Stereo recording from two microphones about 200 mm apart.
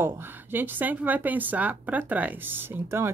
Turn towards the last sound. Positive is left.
turn(degrees=-10)  # may be behind; listen again after turning